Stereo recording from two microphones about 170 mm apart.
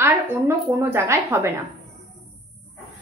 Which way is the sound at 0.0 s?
15° right (ahead or behind).